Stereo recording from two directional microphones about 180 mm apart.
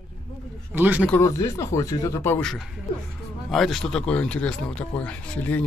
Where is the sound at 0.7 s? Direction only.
10° right (ahead or behind).